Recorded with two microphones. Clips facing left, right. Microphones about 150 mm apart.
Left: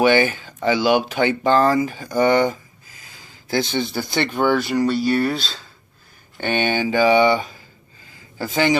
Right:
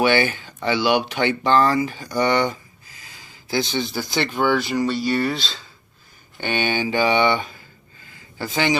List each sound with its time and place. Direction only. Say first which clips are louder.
0.0 s speech: left 3 dB; 40° left (ahead or behind)
3.5 s speech: left 2 dB; 50° left (ahead or behind)
4.9 s speech: left 3 dB; 5° left (ahead or behind)
6.4 s speech: left 2 dB; 45° left (ahead or behind)